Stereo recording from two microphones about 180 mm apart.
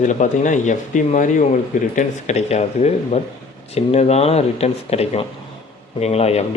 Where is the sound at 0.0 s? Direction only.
45° left (ahead or behind).